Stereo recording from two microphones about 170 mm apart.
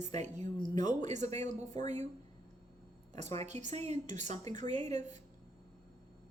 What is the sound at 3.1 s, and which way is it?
A woman's voice, 40° right (ahead or behind).